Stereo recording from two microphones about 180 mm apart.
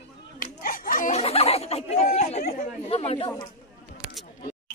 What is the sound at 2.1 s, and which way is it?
Chatter, 35° left (ahead or behind).